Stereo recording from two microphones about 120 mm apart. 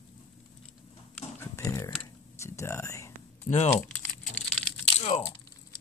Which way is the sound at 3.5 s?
90° left.